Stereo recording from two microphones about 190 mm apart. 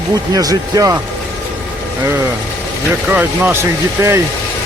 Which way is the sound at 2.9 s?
10° right (ahead or behind).